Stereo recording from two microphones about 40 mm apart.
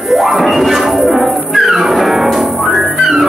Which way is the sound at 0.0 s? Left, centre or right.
Centre.